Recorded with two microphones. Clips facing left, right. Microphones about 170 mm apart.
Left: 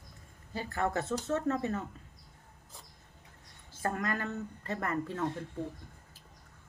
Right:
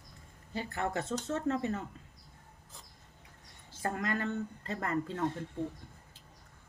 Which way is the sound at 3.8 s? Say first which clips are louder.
Even; 25° right (ahead or behind).